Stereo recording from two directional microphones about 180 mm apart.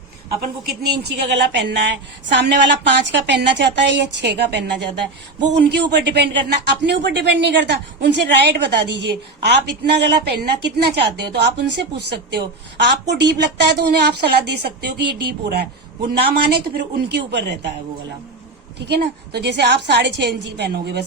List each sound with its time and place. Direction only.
0.7 s a woman's voice: 65° right (ahead or behind)
18.8 s speech: 65° right (ahead or behind)